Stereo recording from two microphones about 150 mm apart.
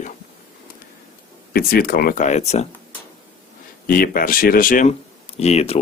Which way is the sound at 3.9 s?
75° left (ahead or behind).